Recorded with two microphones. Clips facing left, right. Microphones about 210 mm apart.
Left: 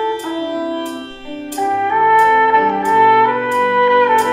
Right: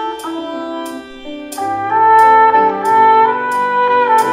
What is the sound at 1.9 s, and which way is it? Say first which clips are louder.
Music: right 5 dB; 20° left (ahead or behind).